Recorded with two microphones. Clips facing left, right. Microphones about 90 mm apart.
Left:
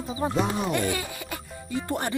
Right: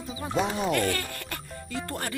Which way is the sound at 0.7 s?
15° left (ahead or behind).